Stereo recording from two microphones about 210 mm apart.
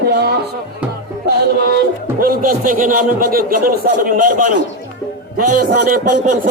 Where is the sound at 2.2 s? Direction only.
45° right (ahead or behind).